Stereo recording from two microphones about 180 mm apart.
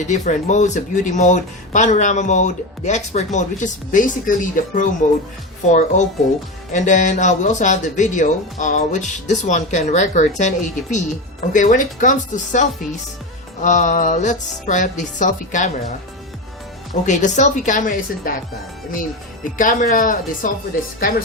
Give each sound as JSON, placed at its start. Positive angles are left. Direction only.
{"t": 0.0, "sound": "speech", "side_deg": 40}
{"t": 16.9, "sound": "speech", "side_deg": 45}
{"t": 19.5, "sound": "speech", "side_deg": 50}